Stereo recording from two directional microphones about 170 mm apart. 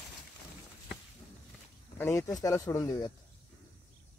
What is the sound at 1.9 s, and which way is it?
Speech, 15° left (ahead or behind).